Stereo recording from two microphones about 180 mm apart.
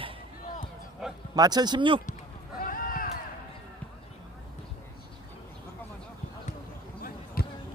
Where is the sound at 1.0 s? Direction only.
Centre (ahead or behind).